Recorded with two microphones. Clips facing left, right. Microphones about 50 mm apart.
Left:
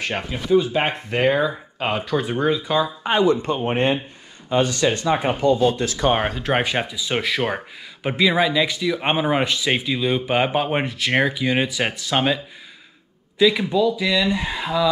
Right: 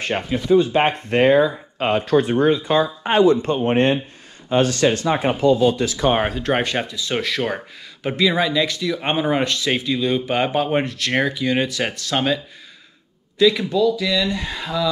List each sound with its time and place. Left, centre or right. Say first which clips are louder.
0.5 s speech: right 2 dB; right
3.3 s speech: right 3 dB; right
5.9 s speech: right 1 dB; left
6.1 s speech: right 1 dB; centre
13.4 s speech: right 1 dB; centre